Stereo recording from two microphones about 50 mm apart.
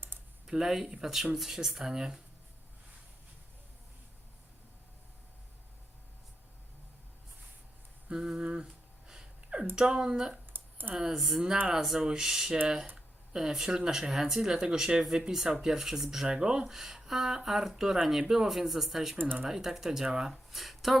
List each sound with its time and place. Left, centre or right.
0.1 s computer keyboard: right
0.4 s speech: centre
8.1 s speech: centre
9.0 s a sound: centre
9.7 s speech: centre
10.5 s a sound: right
10.9 s speech: centre
11.2 s speech: centre